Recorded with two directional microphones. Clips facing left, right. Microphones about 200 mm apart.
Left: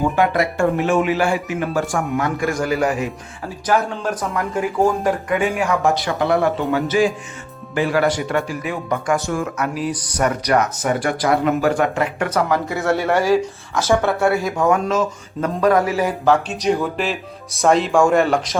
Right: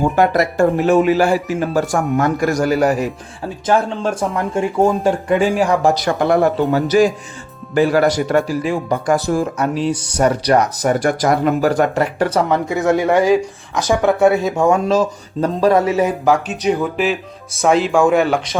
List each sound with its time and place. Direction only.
0.2 s speech: 40° right (ahead or behind)
3.7 s speech: 25° right (ahead or behind)
6.1 s speech: 45° right (ahead or behind); by 16.1 s 25° right (ahead or behind)
16.2 s speech: 10° right (ahead or behind)